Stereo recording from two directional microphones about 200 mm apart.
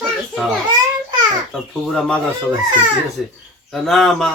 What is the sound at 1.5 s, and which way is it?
A man's voice, centre (ahead or behind).